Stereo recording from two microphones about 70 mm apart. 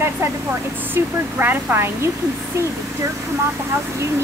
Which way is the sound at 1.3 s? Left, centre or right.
Right.